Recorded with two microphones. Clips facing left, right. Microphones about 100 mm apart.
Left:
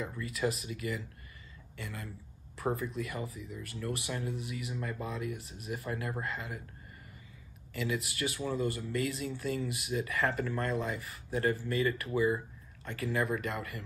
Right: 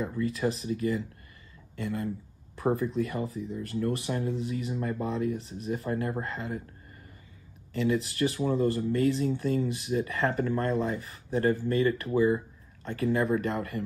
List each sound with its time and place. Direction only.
0.2 s speech: 30° right (ahead or behind)
7.8 s speech: 35° right (ahead or behind)